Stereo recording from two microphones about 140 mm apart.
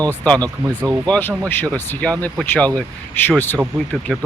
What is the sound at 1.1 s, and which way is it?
Speech, 15° left (ahead or behind).